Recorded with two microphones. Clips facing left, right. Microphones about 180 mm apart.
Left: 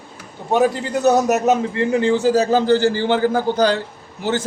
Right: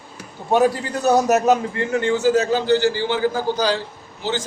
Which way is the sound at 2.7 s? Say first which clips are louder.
Left 2 dB; 50° left (ahead or behind).